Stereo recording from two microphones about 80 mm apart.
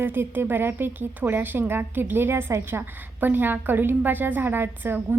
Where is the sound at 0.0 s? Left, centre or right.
Right.